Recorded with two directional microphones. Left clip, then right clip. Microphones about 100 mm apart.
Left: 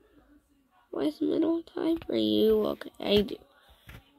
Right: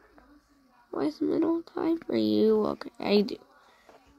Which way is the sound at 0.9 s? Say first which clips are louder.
Even; 35° right (ahead or behind).